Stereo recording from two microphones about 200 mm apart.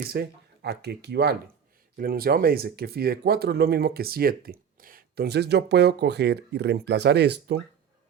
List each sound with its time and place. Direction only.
0.1 s speech: 55° right (ahead or behind)